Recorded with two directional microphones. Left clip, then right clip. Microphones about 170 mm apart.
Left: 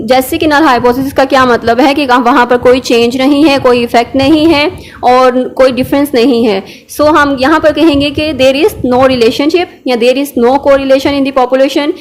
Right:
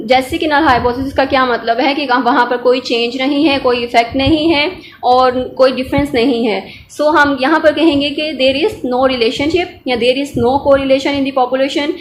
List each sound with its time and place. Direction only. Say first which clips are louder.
0.1 s a woman's voice: left 4 dB; 45° left (ahead or behind)